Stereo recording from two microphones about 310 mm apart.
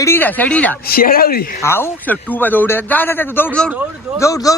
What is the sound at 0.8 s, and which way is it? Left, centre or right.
Speech, left.